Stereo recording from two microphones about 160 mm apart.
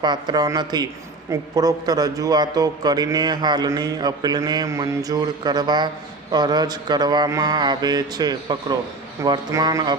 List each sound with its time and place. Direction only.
0.0 s a man's voice: 25° right (ahead or behind)